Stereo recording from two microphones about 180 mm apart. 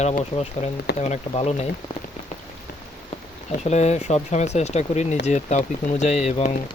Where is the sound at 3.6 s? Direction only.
40° left (ahead or behind).